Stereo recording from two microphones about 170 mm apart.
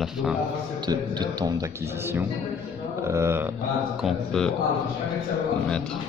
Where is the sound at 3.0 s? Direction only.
15° right (ahead or behind).